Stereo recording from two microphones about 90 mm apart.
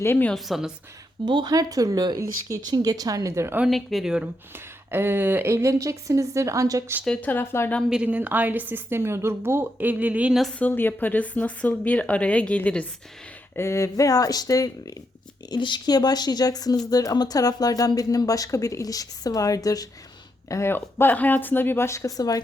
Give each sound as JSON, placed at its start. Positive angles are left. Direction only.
{"t": 0.0, "sound": "speech", "side_deg": 25}
{"t": 0.3, "sound": "speech", "side_deg": 0}
{"t": 1.2, "sound": "speech", "side_deg": -60}
{"t": 1.5, "sound": "a woman's voice", "side_deg": -40}
{"t": 3.7, "sound": "speech", "side_deg": 0}
{"t": 4.5, "sound": "a woman's voice", "side_deg": -25}
{"t": 7.2, "sound": "speech", "side_deg": 20}
{"t": 7.9, "sound": "a woman's voice", "side_deg": -15}
{"t": 10.6, "sound": "speech", "side_deg": 20}
{"t": 13.6, "sound": "speech", "side_deg": 35}
{"t": 15.4, "sound": "speech", "side_deg": 55}
{"t": 20.5, "sound": "speech", "side_deg": 30}